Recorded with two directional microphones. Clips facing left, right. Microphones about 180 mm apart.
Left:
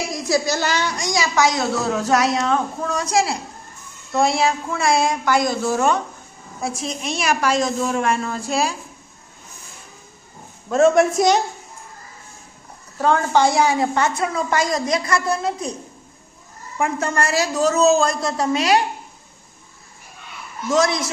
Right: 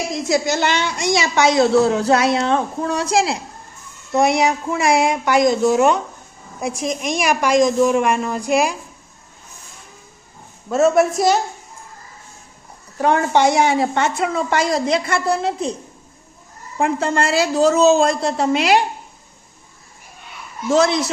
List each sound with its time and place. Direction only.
0.1 s a woman's voice: 20° right (ahead or behind)
10.7 s a woman's voice: 5° right (ahead or behind)
13.0 s a woman's voice: 20° right (ahead or behind)
16.7 s a woman's voice: 30° right (ahead or behind)
20.7 s a woman's voice: 30° right (ahead or behind)